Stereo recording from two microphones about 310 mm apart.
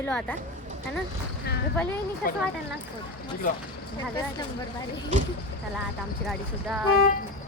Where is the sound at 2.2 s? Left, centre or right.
Left.